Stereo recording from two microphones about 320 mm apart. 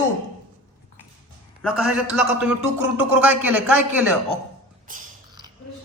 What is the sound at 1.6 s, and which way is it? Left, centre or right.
A man's voice, centre.